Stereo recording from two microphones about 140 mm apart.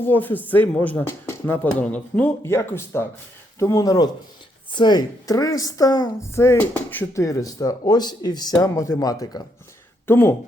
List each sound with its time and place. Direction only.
0.0 s a woman's voice: 15° left (ahead or behind)